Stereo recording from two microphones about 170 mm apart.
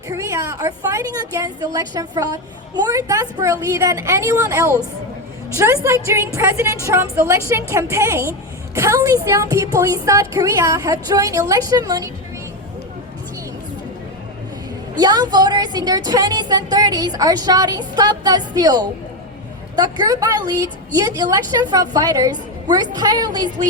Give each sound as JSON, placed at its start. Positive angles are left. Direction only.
{"t": 0.1, "sound": "a woman's voice", "side_deg": -20}
{"t": 14.9, "sound": "a woman's voice", "side_deg": -25}